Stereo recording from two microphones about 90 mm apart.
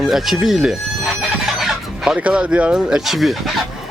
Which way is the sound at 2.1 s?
15° right (ahead or behind).